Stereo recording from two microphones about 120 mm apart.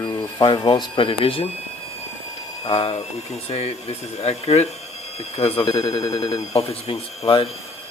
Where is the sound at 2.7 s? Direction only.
60° left (ahead or behind).